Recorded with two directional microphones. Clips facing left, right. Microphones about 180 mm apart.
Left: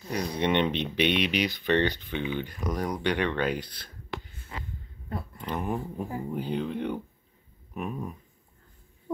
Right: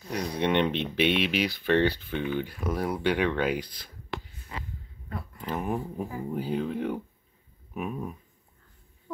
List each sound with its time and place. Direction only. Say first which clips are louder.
0.1 s speech: even; centre (ahead or behind)
5.4 s speech: right 1 dB; 5° right (ahead or behind)
7.7 s a sound: right 1 dB; centre (ahead or behind)